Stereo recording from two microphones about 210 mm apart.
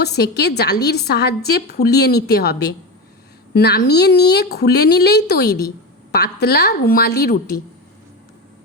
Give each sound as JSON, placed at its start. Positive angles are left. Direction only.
{"t": 0.0, "sound": "a woman's voice", "side_deg": 50}